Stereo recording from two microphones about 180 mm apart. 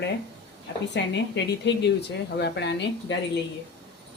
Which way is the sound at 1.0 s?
80° left.